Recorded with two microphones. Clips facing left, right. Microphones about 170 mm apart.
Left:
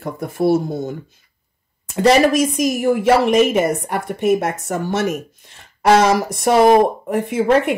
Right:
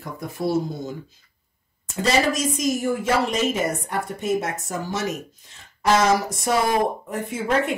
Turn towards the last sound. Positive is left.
turn(degrees=65)  # may be behind; listen again after turning